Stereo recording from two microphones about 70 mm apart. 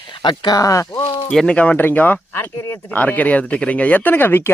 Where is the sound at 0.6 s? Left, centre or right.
Left.